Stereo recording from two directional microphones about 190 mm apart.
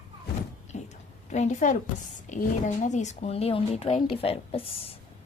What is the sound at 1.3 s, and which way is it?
A woman's voice, 40° left (ahead or behind).